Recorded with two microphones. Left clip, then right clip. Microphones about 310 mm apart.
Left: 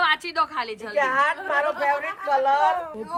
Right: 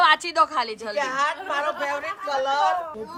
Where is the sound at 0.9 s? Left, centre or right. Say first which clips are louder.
Left 4 dB; left.